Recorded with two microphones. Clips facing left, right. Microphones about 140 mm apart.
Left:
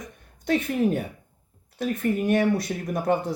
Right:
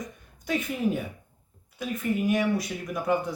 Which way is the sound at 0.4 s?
50° left (ahead or behind).